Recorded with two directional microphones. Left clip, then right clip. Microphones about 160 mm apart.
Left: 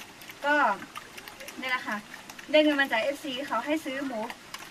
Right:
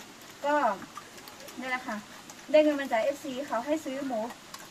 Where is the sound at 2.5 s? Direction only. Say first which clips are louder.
Left 1 dB; 5° right (ahead or behind).